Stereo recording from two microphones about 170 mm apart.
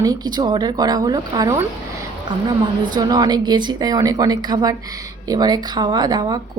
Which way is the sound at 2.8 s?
25° right (ahead or behind).